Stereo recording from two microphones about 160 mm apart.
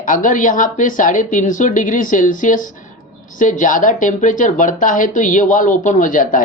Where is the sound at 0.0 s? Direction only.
55° left (ahead or behind).